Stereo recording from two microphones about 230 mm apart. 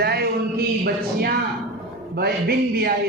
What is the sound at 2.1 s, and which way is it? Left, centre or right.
Speech, right.